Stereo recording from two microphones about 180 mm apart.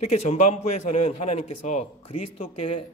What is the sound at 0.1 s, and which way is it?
A man's voice, 40° left (ahead or behind).